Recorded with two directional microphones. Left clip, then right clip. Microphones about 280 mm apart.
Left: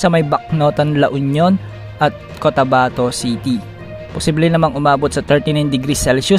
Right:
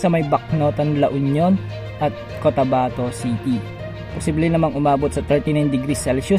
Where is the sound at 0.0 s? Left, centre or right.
Left.